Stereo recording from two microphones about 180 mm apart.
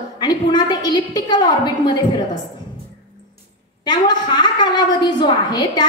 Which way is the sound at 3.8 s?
25° left (ahead or behind).